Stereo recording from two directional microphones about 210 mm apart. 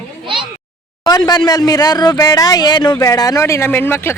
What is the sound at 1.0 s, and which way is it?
Speech, 20° left (ahead or behind).